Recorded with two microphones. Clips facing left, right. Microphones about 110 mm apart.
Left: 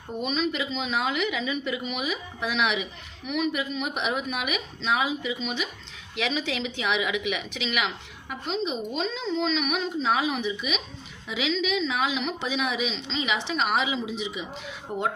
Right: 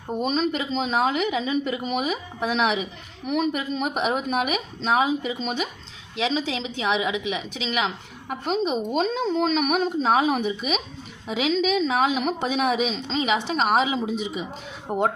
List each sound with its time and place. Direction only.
0.1 s a woman's voice: 40° right (ahead or behind)